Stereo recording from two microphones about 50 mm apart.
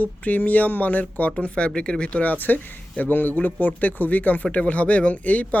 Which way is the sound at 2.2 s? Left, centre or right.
Left.